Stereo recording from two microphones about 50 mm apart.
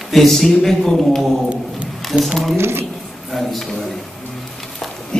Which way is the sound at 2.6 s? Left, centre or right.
Right.